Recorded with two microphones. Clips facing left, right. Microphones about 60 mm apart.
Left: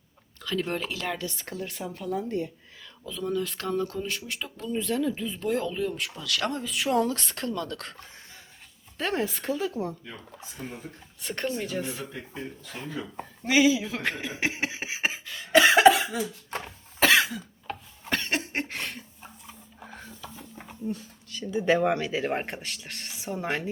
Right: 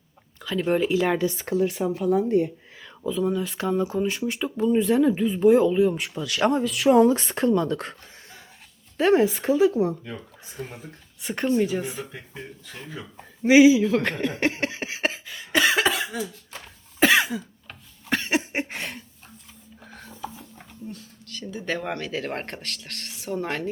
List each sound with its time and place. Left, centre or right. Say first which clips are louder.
0.4 s speech: right 7 dB; centre
1.5 s speech: right 12 dB; centre
3.1 s speech: right 5 dB; centre
6.7 s speech: right 9 dB; centre
7.1 s speech: right 10 dB; right
9.0 s speech: right 10 dB; centre
13.4 s speech: right 7 dB; right
13.7 s speech: right 8 dB; centre
15.3 s cough: left 6 dB; centre
15.6 s cough: left 5 dB; centre
17.0 s cough: right 2 dB; centre
18.1 s a sound: right 4 dB; centre
19.8 s music: left 1 dB; centre
20.8 s speech: left 6 dB; centre